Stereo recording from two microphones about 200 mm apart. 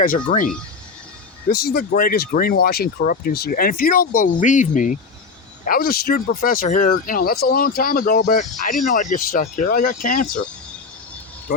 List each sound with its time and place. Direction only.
1.5 s speech: 50° left (ahead or behind)